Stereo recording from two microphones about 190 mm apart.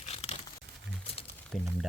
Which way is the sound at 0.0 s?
35° left (ahead or behind).